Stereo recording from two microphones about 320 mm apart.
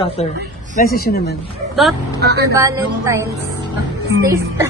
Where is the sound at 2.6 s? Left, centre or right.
Centre.